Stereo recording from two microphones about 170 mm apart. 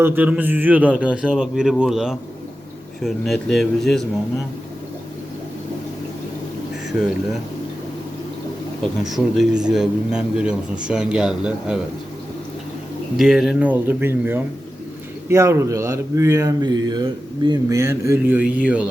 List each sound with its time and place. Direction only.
0.0 s a man's voice: 10° right (ahead or behind)
8.8 s a man's voice: centre (ahead or behind)
13.1 s speech: centre (ahead or behind)